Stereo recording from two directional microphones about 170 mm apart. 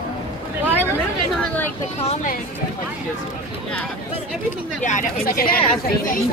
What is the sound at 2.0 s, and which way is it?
Speech, 40° left (ahead or behind).